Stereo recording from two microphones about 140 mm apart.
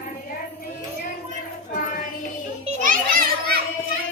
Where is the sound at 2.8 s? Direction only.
85° right.